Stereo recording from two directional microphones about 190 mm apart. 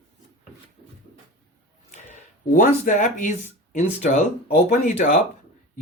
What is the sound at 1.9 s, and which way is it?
Speech, 40° left (ahead or behind).